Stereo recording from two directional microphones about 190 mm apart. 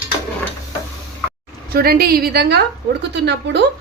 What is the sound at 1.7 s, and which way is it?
A woman's voice, 50° right (ahead or behind).